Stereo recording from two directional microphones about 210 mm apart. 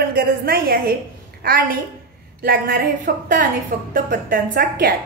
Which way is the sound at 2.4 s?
45° right (ahead or behind).